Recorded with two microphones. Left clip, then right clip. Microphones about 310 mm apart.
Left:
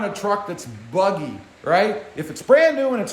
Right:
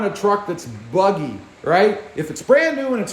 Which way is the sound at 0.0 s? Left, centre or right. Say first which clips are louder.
Right 4 dB; centre.